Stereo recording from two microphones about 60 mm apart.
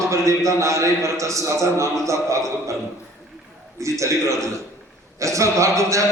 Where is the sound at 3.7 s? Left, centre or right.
Right.